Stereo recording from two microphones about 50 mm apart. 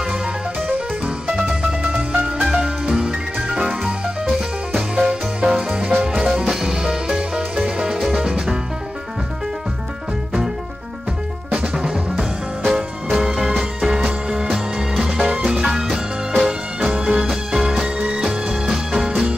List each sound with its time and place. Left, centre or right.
0.7 s music: centre
11.5 s music: centre
17.9 s music: centre